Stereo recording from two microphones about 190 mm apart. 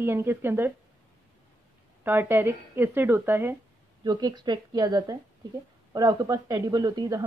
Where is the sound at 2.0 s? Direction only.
10° right (ahead or behind).